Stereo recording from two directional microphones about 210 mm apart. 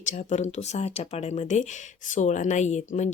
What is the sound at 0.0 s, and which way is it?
Speech, 35° left (ahead or behind).